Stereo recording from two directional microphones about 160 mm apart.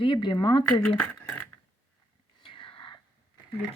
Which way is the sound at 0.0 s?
30° left (ahead or behind).